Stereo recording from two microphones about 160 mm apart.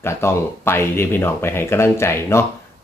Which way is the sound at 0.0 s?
15° left (ahead or behind).